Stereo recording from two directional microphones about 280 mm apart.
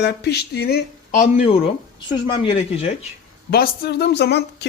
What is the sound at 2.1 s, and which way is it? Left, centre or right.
Speech, centre.